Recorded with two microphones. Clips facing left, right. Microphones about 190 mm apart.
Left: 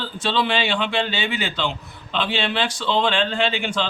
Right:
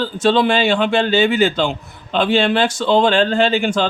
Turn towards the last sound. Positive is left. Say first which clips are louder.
# right 7 dB
turn(degrees=-45)  # may be behind; listen again after turning